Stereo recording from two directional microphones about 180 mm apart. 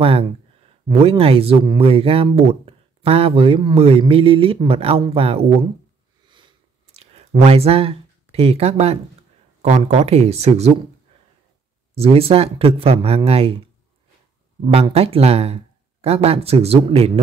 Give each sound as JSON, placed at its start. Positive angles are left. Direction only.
{"t": 0.0, "sound": "speech", "side_deg": -30}
{"t": 6.2, "sound": "a sound", "side_deg": -25}
{"t": 9.6, "sound": "speech", "side_deg": -40}
{"t": 11.9, "sound": "speech", "side_deg": -35}
{"t": 14.6, "sound": "speech", "side_deg": -35}